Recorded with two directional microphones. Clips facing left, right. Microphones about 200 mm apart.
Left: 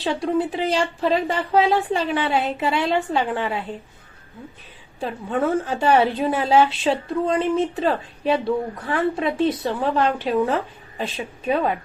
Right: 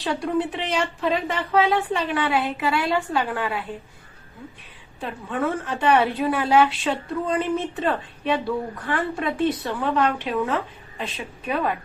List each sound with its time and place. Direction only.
0.0 s a woman's voice: 25° left (ahead or behind)
4.9 s a woman's voice: 30° left (ahead or behind)